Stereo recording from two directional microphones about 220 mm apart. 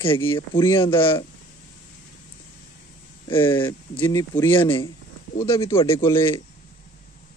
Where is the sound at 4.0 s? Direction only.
10° left (ahead or behind).